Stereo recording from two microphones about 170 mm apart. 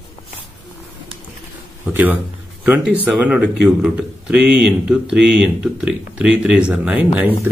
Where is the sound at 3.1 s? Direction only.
5° right (ahead or behind).